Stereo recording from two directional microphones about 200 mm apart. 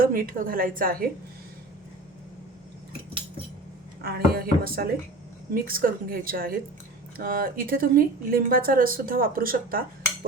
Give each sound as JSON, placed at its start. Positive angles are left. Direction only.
{"t": 0.0, "sound": "a woman's voice", "side_deg": -45}
{"t": 4.0, "sound": "a woman's voice", "side_deg": -50}